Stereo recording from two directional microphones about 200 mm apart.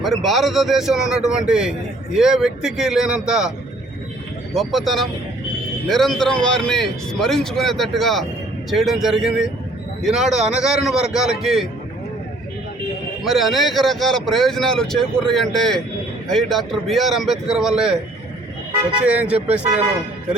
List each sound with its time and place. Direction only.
0.0 s speech: centre (ahead or behind)
4.5 s speech: centre (ahead or behind)
13.2 s speech: centre (ahead or behind)
19.0 s speech: 5° right (ahead or behind)